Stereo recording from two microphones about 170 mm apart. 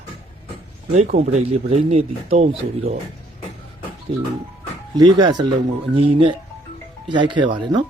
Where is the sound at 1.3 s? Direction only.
40° right (ahead or behind).